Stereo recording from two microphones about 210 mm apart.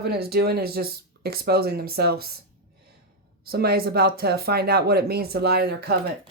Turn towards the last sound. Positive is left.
turn(degrees=-50)  # may be behind; listen again after turning